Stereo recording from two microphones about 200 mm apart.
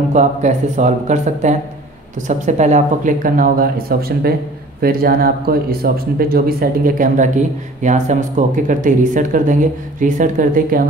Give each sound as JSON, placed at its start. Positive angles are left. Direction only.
{"t": 0.1, "sound": "speech", "side_deg": -35}